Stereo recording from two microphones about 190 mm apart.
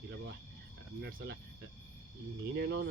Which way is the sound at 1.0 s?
65° right (ahead or behind).